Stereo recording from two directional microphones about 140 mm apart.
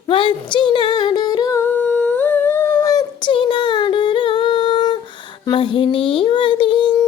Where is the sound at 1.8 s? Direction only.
10° left (ahead or behind); by 5.0 s 35° left (ahead or behind).